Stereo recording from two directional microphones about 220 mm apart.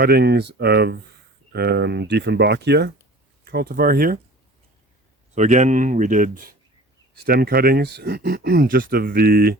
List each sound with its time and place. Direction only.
0.0 s speech: 45° right (ahead or behind)
5.3 s speech: 30° right (ahead or behind)